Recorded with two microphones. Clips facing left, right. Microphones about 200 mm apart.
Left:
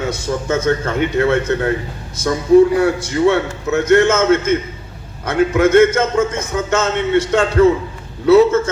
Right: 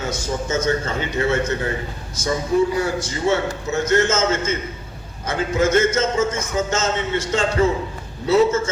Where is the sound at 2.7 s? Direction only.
60° left (ahead or behind).